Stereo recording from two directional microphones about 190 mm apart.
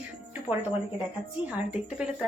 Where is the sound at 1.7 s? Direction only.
5° right (ahead or behind).